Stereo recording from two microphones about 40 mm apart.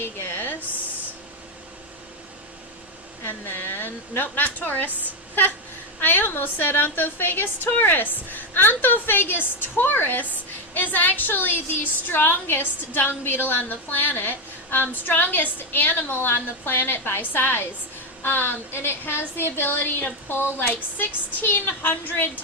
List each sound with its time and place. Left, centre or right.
0.0 s a sound: left
3.2 s a woman's voice: left
6.0 s a woman's voice: left
20.2 s a woman's voice: left